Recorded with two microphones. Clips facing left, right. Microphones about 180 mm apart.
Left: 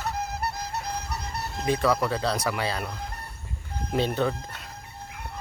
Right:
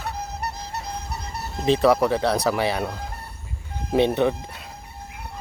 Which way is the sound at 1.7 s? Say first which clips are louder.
Right 6 dB; 25° right (ahead or behind).